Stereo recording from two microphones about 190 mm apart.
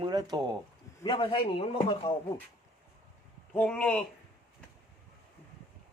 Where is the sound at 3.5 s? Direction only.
5° left (ahead or behind).